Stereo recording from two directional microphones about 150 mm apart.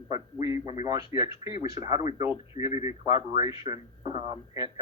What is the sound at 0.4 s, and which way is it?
Speech, 25° right (ahead or behind).